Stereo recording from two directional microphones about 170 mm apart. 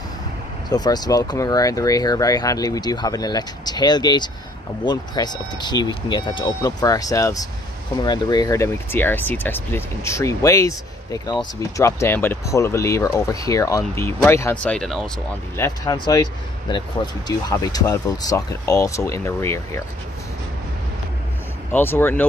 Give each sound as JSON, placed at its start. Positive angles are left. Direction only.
{"t": 0.7, "sound": "speech", "side_deg": 25}
{"t": 15.5, "sound": "speech", "side_deg": 20}
{"t": 21.7, "sound": "speech", "side_deg": 15}